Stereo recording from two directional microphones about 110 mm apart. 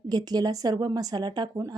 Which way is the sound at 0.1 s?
35° right (ahead or behind).